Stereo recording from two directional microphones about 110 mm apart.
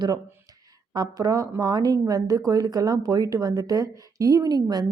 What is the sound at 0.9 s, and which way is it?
Speech, 35° right (ahead or behind).